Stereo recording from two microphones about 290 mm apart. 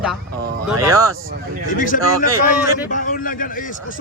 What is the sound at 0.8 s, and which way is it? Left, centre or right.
Speech, centre.